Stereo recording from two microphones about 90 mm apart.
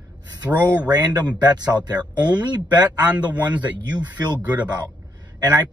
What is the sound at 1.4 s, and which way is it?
Speech, 50° right (ahead or behind).